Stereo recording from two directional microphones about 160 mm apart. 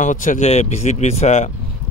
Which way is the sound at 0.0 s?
50° left (ahead or behind).